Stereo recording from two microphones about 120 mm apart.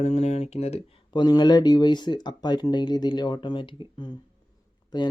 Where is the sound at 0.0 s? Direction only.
65° left (ahead or behind).